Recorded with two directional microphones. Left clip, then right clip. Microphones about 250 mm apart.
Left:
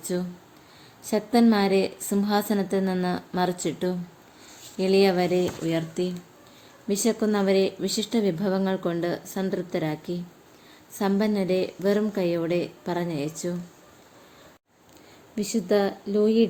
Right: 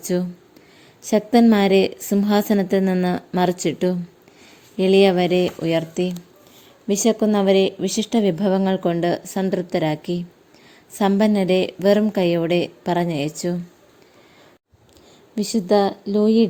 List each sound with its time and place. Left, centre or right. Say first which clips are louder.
0.0 s a woman's voice: right 6 dB; right
15.4 s a woman's voice: right 6 dB; right